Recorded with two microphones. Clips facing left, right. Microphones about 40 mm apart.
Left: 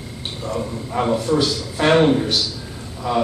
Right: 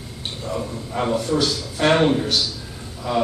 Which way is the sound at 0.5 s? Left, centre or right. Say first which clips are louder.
Left 2 dB; centre.